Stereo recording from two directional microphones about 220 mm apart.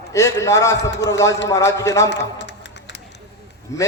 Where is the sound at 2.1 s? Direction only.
55° left (ahead or behind).